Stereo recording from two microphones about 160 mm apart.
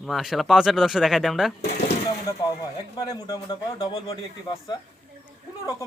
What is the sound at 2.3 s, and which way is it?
Speech, 20° left (ahead or behind).